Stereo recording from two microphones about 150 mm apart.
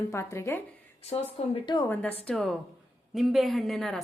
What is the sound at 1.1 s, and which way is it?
Speech, 45° left (ahead or behind).